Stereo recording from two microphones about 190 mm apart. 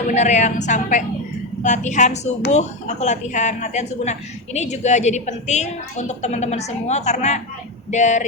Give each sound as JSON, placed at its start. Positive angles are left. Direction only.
{"t": 0.1, "sound": "a woman's voice", "side_deg": 35}